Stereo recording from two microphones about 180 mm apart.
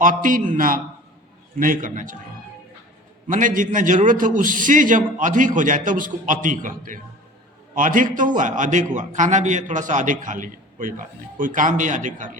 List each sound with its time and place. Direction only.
0.0 s a man's voice: 50° right (ahead or behind)
3.3 s a man's voice: 45° right (ahead or behind)